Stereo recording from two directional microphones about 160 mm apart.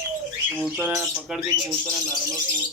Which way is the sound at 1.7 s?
5° left (ahead or behind).